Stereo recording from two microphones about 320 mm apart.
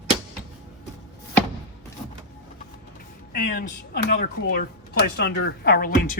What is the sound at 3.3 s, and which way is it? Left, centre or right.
A woman's voice, left.